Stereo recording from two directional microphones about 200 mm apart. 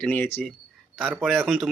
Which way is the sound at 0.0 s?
5° left (ahead or behind).